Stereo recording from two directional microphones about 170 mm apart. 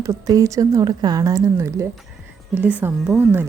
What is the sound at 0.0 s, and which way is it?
A woman's voice, 20° right (ahead or behind).